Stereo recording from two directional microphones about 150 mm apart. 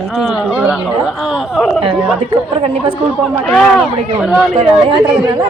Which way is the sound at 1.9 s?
10° right (ahead or behind).